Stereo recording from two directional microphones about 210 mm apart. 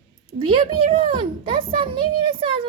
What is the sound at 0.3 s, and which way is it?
Speech, 25° right (ahead or behind).